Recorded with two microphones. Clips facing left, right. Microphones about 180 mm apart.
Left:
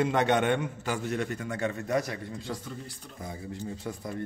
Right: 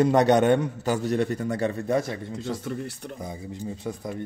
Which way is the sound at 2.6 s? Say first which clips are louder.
Right 9 dB; 70° right (ahead or behind).